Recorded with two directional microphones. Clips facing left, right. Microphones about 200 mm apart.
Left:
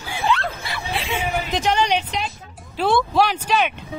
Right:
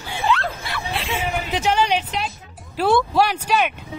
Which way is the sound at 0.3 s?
Centre (ahead or behind).